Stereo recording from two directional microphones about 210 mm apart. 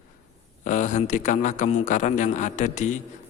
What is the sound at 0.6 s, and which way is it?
A man's voice, 35° left (ahead or behind).